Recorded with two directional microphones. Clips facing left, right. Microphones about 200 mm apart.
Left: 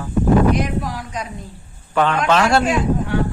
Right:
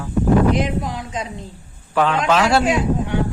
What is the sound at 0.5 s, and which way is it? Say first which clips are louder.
Speech: even; 20° right (ahead or behind).